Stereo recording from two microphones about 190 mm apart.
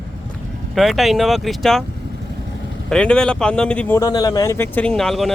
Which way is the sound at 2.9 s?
5° left (ahead or behind).